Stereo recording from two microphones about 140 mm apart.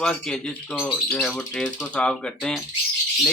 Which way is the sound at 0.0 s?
5° left (ahead or behind).